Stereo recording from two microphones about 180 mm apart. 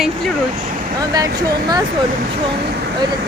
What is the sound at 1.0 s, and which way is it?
Speech, 20° right (ahead or behind).